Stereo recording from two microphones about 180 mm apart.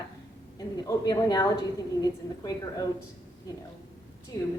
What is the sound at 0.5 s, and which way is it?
A woman's voice, 20° left (ahead or behind).